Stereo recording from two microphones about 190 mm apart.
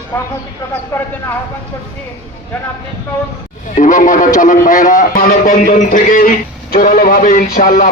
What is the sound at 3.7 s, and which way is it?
A man's voice, 40° left (ahead or behind).